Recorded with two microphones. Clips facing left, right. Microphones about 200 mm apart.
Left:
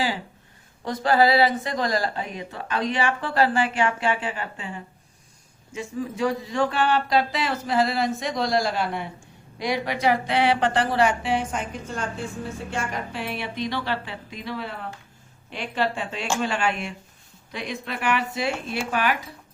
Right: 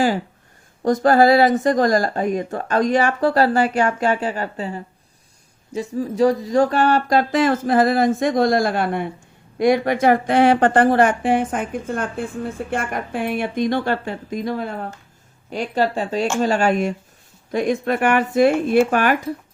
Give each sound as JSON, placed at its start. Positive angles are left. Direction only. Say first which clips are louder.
{"t": 0.8, "sound": "speech", "louder": "right 6 dB", "side_deg": -45}